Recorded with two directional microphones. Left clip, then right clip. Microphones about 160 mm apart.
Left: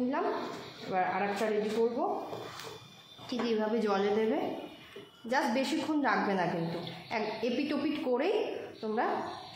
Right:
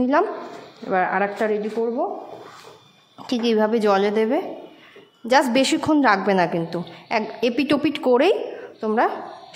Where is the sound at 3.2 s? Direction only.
90° right; by 9.1 s 70° right (ahead or behind).